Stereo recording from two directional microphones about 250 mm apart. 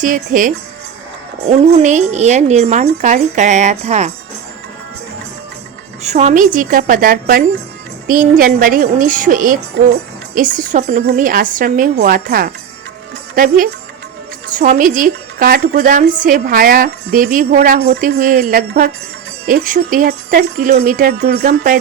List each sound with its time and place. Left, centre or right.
0.0 s a woman's voice: right
6.0 s a woman's voice: right